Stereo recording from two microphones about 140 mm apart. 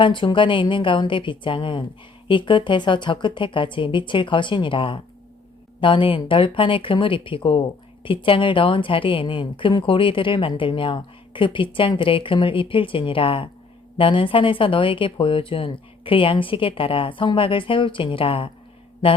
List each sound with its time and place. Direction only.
0.0 s a woman's voice: 35° left (ahead or behind)